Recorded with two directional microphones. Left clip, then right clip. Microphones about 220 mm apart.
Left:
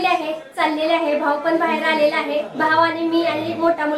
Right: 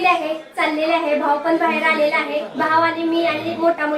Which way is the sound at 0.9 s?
Centre (ahead or behind).